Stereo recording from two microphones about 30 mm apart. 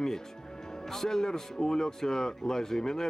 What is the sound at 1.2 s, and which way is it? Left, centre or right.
Speech, centre.